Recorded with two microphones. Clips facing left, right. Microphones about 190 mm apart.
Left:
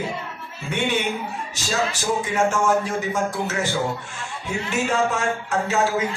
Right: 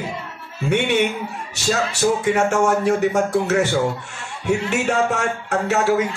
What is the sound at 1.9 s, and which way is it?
Speech, 65° right (ahead or behind).